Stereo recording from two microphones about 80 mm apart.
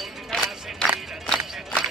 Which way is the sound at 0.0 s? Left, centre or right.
Centre.